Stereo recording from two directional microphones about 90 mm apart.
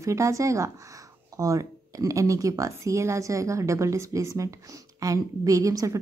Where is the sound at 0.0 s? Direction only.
35° right (ahead or behind).